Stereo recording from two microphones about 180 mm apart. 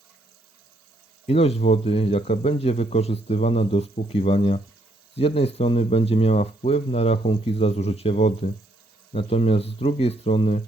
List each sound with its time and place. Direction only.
1.3 s speech: 35° left (ahead or behind)